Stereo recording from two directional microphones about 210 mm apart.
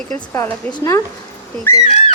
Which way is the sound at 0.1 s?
15° left (ahead or behind).